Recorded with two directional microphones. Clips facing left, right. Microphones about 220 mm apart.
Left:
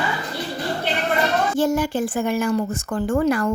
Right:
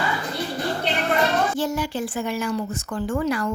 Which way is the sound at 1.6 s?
50° left (ahead or behind).